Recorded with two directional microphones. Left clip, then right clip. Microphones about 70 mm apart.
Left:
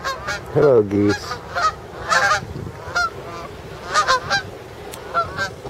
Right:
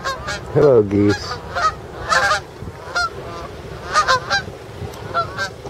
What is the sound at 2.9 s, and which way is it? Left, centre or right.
Goose, centre.